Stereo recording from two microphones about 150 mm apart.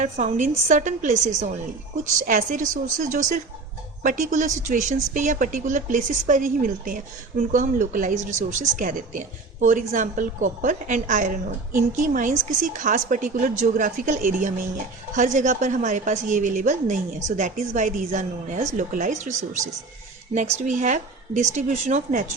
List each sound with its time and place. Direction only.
0.0 s a woman's voice: 50° right (ahead or behind)